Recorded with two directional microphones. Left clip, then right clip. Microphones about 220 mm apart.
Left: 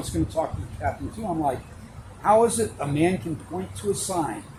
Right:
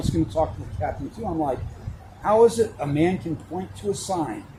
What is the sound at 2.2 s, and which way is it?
Speech, 40° right (ahead or behind).